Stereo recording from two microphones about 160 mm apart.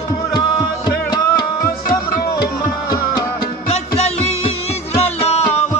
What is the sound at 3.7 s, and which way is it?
Music, 40° left (ahead or behind).